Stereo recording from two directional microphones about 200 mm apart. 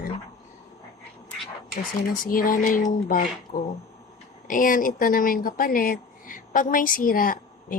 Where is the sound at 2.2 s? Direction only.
45° left (ahead or behind).